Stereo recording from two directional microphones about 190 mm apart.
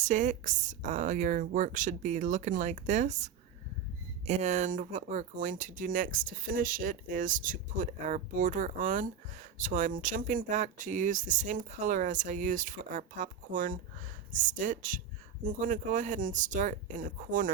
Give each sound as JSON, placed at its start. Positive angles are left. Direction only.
{"t": 0.0, "sound": "speech", "side_deg": -40}
{"t": 4.3, "sound": "speech", "side_deg": -35}